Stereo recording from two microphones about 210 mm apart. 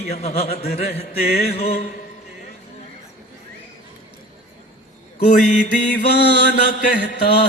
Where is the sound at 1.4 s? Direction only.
30° left (ahead or behind).